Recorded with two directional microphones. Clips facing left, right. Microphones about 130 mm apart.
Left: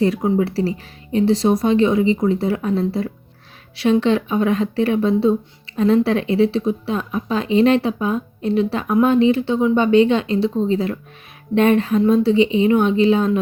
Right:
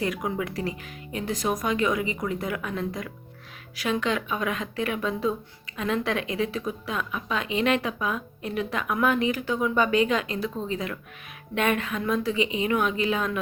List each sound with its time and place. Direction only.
0.0 s speech: 30° left (ahead or behind)